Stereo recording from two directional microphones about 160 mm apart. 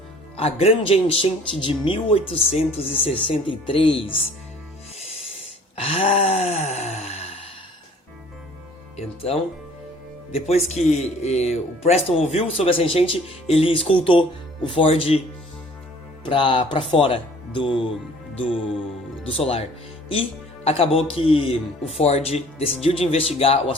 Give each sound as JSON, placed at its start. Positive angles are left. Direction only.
{"t": 0.3, "sound": "speech", "side_deg": 35}
{"t": 5.7, "sound": "sigh", "side_deg": 35}
{"t": 9.0, "sound": "speech", "side_deg": 40}
{"t": 16.2, "sound": "speech", "side_deg": 30}
{"t": 20.7, "sound": "speech", "side_deg": 35}